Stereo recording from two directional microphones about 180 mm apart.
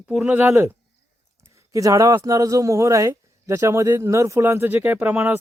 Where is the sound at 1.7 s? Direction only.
20° right (ahead or behind).